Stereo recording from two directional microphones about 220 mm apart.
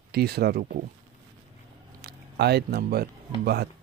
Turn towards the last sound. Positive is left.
turn(degrees=-45)  # may be behind; listen again after turning